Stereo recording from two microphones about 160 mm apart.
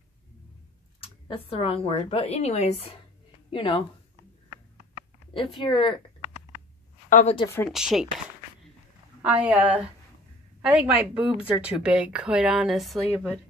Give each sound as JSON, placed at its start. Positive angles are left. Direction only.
{"t": 1.0, "sound": "speech", "side_deg": 35}
{"t": 5.3, "sound": "speech", "side_deg": 30}
{"t": 7.1, "sound": "a woman's voice", "side_deg": 55}
{"t": 7.7, "sound": "a woman's voice", "side_deg": -5}
{"t": 9.2, "sound": "a woman's voice", "side_deg": -10}